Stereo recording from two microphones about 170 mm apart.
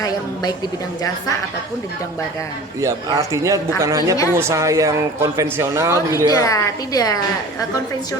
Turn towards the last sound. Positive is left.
turn(degrees=20)  # may be behind; listen again after turning